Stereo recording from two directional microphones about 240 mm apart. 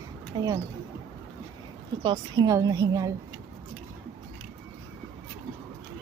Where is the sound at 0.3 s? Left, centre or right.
Centre.